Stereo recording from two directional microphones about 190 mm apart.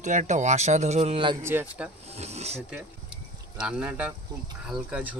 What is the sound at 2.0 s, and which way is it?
Speech, 35° right (ahead or behind).